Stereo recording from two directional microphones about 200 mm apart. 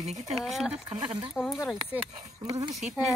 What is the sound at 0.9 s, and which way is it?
Speech, 25° right (ahead or behind).